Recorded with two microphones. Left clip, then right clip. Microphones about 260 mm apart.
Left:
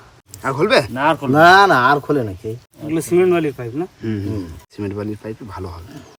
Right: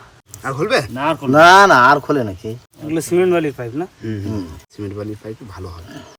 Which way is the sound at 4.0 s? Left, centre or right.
Left.